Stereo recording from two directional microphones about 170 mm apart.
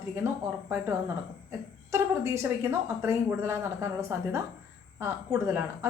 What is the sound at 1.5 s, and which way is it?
A woman's voice, 15° right (ahead or behind).